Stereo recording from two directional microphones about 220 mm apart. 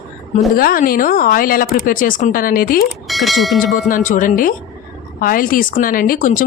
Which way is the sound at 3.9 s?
35° left (ahead or behind).